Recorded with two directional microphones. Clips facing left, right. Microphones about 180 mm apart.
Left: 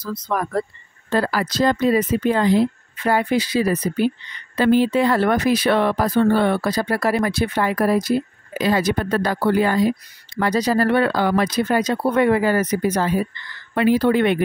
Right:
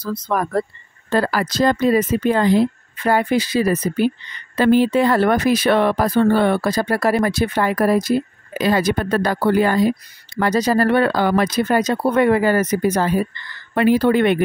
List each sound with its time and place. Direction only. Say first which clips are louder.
0.0 s speech: right 2 dB; 50° right (ahead or behind)